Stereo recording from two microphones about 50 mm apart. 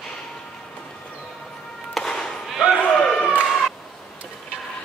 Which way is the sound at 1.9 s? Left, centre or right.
Centre.